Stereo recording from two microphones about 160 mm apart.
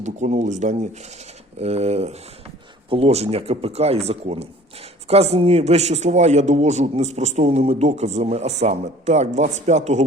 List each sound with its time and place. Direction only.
0.0 s a man's voice: 50° right (ahead or behind)